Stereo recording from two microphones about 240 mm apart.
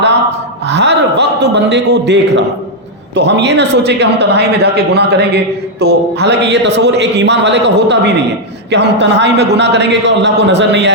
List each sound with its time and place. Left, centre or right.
0.6 s a man's voice: right